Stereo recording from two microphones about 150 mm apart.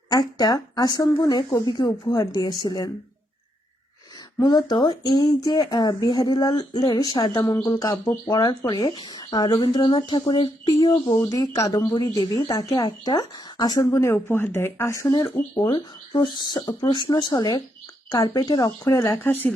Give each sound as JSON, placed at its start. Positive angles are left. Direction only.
{"t": 0.1, "sound": "speech", "side_deg": 25}
{"t": 4.4, "sound": "speech", "side_deg": 30}
{"t": 19.2, "sound": "speech", "side_deg": 15}